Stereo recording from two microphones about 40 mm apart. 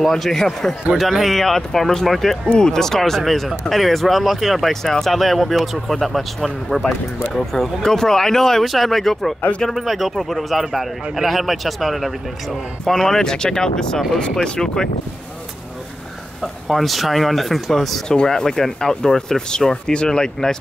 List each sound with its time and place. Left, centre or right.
0.1 s speech: centre
2.4 s speech: left
2.7 s speech: centre
12.8 s speech: centre
16.6 s speech: centre
18.0 s speech: centre